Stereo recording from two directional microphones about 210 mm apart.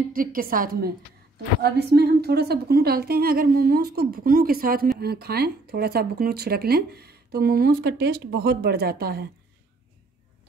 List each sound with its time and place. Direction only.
0.1 s speech: 40° right (ahead or behind)